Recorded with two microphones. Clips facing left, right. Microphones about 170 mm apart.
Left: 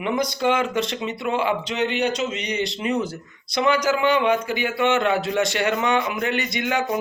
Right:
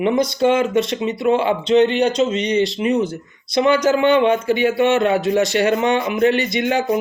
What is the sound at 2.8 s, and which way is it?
Speech, 20° right (ahead or behind).